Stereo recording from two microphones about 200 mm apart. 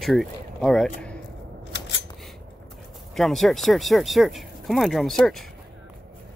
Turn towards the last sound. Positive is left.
turn(degrees=0)  # may be behind; listen again after turning